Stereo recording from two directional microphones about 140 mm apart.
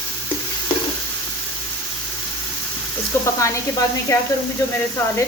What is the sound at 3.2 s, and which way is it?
A woman's voice, 20° left (ahead or behind).